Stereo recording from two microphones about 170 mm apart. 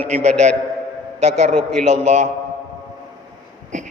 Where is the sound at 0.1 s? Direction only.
40° right (ahead or behind).